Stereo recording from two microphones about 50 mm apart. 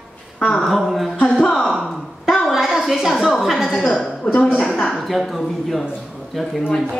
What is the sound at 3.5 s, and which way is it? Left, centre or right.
Speech, centre.